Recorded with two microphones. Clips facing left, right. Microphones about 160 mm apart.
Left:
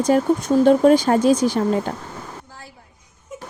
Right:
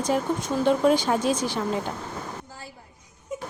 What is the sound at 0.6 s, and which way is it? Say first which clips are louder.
Speech: left 6 dB; 50° left (ahead or behind).